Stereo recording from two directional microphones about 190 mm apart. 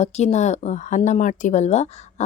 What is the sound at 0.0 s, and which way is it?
Speech, 35° left (ahead or behind).